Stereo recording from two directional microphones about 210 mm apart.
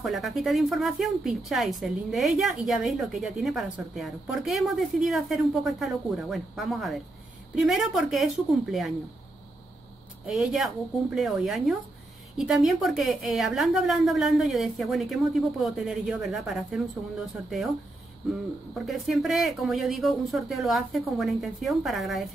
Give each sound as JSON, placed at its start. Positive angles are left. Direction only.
{"t": 0.0, "sound": "a woman's voice", "side_deg": 0}
{"t": 10.2, "sound": "a woman's voice", "side_deg": 0}
{"t": 18.9, "sound": "a woman's voice", "side_deg": 0}